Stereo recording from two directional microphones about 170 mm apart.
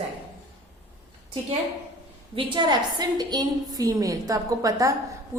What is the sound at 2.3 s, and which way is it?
A woman's voice, 30° right (ahead or behind).